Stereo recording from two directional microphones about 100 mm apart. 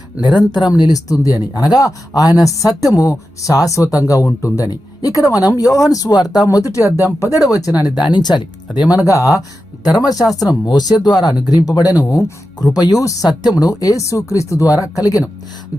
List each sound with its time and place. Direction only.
0.2 s speech: 45° left (ahead or behind)
9.0 s speech: 30° left (ahead or behind)